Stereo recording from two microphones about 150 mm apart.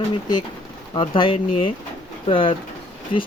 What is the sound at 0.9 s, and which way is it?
Speech, 35° left (ahead or behind).